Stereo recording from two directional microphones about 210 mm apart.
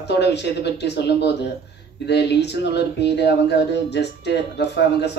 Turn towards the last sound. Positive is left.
turn(degrees=55)  # may be behind; listen again after turning